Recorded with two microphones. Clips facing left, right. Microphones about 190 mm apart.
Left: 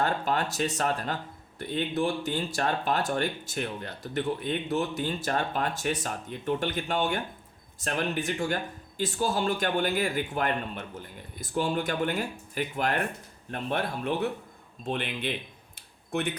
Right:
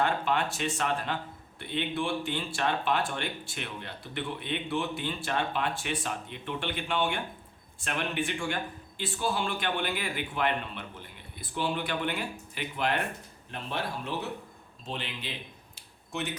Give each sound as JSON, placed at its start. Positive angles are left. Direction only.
{"t": 0.0, "sound": "a man's voice", "side_deg": 40}
{"t": 13.5, "sound": "speech", "side_deg": 55}
{"t": 15.7, "sound": "a sound", "side_deg": 55}